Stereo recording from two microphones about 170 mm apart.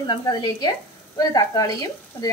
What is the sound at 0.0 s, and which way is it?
Speech, 25° left (ahead or behind).